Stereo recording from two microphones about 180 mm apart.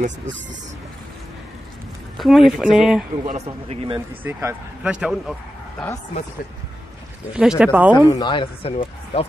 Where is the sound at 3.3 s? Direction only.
35° right (ahead or behind).